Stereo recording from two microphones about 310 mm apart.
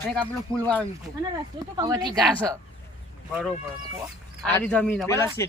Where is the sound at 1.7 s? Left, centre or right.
Centre.